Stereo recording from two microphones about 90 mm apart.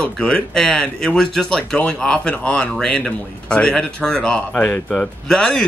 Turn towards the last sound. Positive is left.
turn(degrees=10)  # may be behind; listen again after turning